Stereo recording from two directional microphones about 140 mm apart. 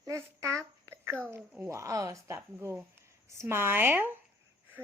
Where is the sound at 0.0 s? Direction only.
20° right (ahead or behind).